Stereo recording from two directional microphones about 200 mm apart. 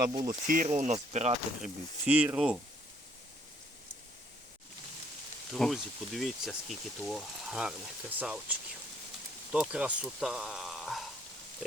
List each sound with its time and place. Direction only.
0.3 s speech: 40° right (ahead or behind)
1.6 s speech: 5° right (ahead or behind)
5.5 s speech: centre (ahead or behind)